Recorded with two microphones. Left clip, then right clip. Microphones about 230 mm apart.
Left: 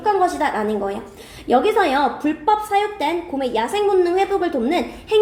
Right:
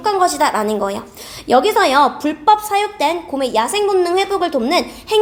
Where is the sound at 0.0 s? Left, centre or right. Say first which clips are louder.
Right 3 dB; right.